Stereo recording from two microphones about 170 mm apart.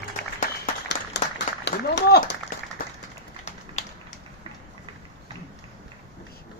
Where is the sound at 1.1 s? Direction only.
90° left.